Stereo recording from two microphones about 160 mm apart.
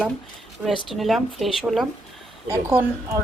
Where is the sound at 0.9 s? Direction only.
Centre (ahead or behind).